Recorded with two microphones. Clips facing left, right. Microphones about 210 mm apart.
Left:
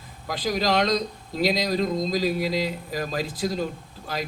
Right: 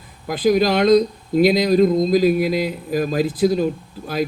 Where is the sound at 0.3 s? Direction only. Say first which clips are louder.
Right 8 dB; 55° right (ahead or behind).